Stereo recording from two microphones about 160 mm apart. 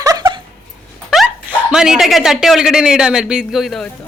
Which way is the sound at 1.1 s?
Centre (ahead or behind).